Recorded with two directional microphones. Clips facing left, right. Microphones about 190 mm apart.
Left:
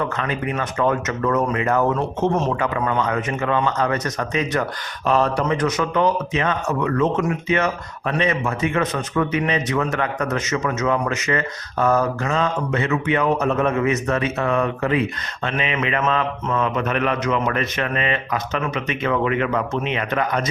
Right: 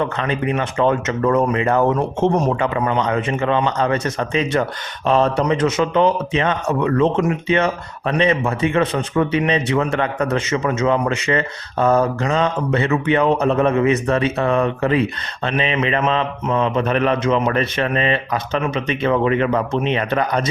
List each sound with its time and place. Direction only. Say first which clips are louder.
0.0 s speech: right 3 dB; 25° right (ahead or behind)
1.9 s speech: right 3 dB; 15° right (ahead or behind)
15.4 s mantra: right 4 dB; 35° right (ahead or behind)